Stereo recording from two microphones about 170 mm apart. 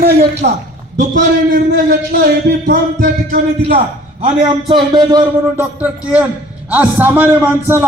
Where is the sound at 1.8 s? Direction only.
60° right (ahead or behind).